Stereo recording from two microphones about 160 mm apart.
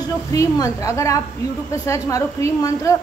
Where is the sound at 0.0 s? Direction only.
20° left (ahead or behind).